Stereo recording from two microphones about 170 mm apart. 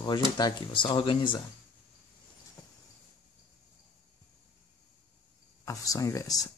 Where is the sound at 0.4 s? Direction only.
25° left (ahead or behind).